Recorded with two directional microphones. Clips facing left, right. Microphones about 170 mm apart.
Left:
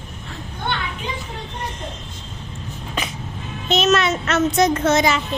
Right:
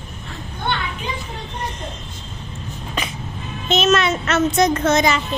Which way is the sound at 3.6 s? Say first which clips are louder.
Even; centre (ahead or behind).